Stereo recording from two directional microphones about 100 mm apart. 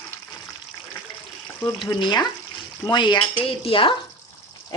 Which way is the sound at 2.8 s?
50° left (ahead or behind).